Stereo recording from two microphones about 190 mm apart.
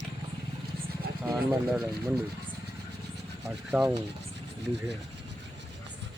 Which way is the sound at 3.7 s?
5° right (ahead or behind).